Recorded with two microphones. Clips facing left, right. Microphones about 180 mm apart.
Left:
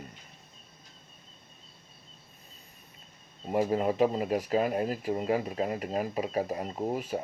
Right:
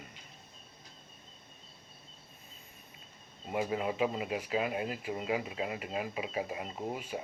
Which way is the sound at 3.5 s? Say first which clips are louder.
Left 6 dB; 40° left (ahead or behind).